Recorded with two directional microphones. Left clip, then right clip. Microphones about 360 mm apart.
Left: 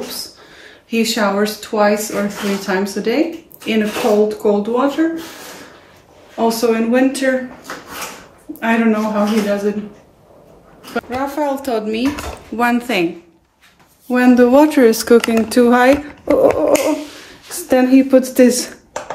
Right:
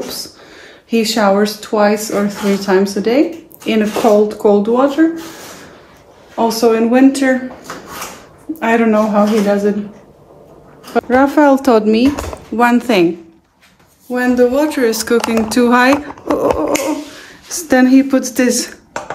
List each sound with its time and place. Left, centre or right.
0.1 s speech: centre
6.3 s speech: centre
11.0 s speech: centre
14.1 s speech: centre